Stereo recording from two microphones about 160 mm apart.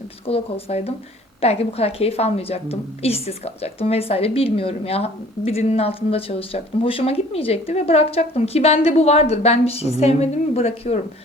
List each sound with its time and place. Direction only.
0.3 s a woman's voice: 40° left (ahead or behind)